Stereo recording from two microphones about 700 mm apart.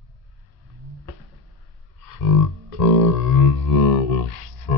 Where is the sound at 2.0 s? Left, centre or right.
Left.